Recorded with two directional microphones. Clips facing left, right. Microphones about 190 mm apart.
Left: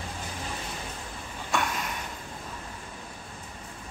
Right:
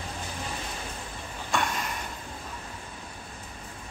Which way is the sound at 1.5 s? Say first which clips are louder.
Even; 5° left (ahead or behind).